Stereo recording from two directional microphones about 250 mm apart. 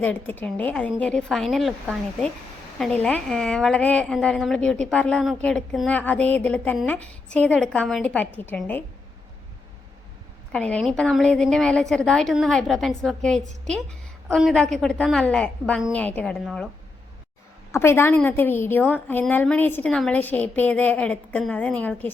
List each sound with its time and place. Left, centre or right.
0.0 s a woman's voice: centre
10.5 s a woman's voice: centre
17.7 s a woman's voice: centre